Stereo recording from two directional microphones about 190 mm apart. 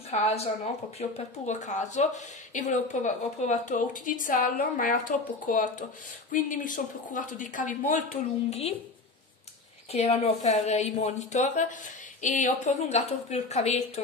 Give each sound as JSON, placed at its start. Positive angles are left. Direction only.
{"t": 0.1, "sound": "speech", "side_deg": 35}
{"t": 8.5, "sound": "speech", "side_deg": 30}
{"t": 9.9, "sound": "speech", "side_deg": 30}